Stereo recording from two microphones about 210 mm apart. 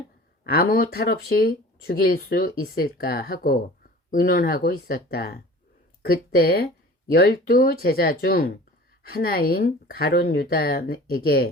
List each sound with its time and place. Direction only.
0.4 s speech: 45° left (ahead or behind)